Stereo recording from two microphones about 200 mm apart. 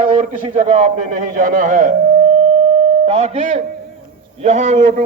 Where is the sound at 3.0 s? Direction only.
30° right (ahead or behind).